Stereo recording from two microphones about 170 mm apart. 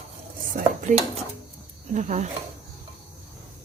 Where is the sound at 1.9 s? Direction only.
45° right (ahead or behind).